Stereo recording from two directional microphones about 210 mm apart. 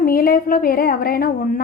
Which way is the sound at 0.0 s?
45° left (ahead or behind).